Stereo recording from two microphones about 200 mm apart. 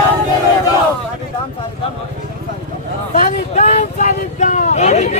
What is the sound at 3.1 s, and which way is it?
Vehicle, 35° left (ahead or behind).